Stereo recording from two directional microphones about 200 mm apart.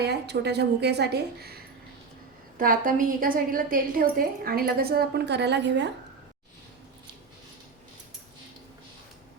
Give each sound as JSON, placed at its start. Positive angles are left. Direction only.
{"t": 0.0, "sound": "a woman's voice", "side_deg": -55}